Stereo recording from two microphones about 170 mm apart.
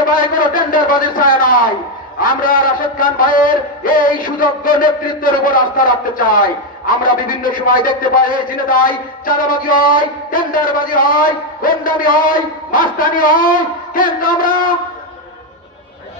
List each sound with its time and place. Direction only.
0.0 s a man's voice: 55° left (ahead or behind)